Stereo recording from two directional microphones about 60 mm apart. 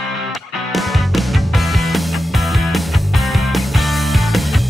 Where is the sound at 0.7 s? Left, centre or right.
Centre.